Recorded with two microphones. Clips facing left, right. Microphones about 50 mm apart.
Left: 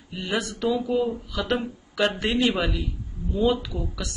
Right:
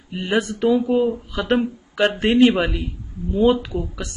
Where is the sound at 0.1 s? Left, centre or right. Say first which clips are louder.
Right 6 dB; right.